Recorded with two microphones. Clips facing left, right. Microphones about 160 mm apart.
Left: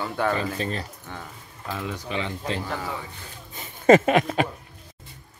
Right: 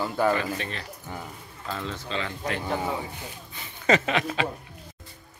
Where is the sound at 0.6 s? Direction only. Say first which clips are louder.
Left 6 dB; 35° left (ahead or behind).